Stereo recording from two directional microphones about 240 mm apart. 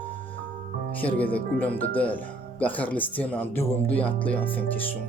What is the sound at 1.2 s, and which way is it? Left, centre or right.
Speech, centre.